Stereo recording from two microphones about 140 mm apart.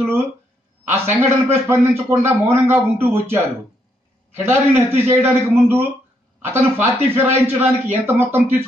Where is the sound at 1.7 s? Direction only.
15° right (ahead or behind).